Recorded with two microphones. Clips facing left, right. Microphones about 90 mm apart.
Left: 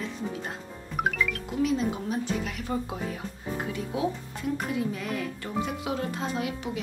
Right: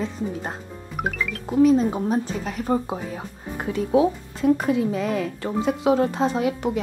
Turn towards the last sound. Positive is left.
turn(degrees=-30)  # may be behind; listen again after turning